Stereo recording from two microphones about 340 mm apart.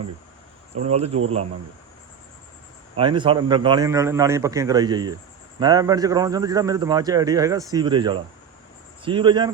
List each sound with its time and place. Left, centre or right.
0.8 s a man's voice: centre
3.0 s a man's voice: centre